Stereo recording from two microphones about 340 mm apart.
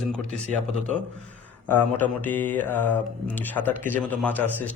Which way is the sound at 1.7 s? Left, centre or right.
Centre.